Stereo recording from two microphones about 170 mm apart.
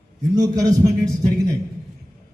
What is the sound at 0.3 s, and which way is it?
Speech, 20° right (ahead or behind).